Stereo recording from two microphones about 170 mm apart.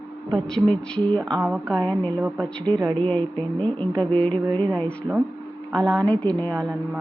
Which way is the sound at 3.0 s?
10° left (ahead or behind).